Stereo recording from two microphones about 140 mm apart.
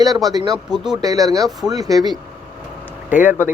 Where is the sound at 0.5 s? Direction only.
5° right (ahead or behind).